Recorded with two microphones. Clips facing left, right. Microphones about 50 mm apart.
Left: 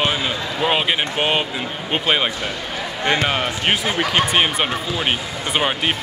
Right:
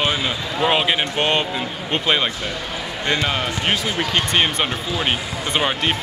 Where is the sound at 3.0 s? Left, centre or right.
Left.